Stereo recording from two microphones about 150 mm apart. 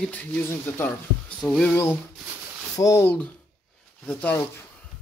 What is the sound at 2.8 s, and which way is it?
Speech, 20° left (ahead or behind).